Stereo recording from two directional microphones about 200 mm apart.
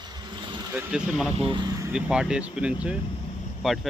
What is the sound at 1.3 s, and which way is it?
Speech, 25° right (ahead or behind).